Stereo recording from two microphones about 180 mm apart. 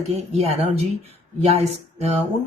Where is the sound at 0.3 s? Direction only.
35° right (ahead or behind).